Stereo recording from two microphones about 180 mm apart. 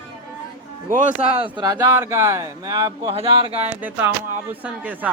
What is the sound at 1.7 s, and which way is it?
Speech, 15° right (ahead or behind).